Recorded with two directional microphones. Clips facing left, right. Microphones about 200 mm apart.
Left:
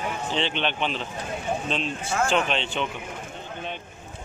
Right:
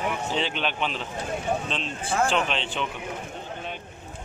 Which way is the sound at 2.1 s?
35° right (ahead or behind).